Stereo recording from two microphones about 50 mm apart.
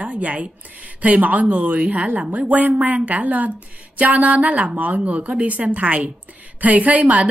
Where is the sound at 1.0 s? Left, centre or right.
Right.